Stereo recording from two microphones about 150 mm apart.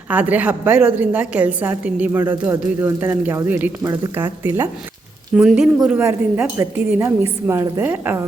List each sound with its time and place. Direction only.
0.1 s a woman's voice: 10° right (ahead or behind)
6.0 s a woman's voice: 15° right (ahead or behind)